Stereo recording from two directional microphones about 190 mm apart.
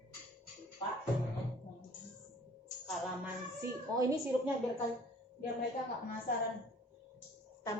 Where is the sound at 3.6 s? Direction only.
15° right (ahead or behind).